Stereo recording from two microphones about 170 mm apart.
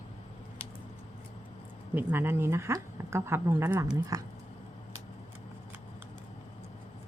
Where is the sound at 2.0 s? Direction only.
10° right (ahead or behind).